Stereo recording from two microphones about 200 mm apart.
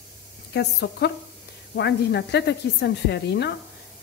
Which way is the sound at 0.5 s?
55° left (ahead or behind).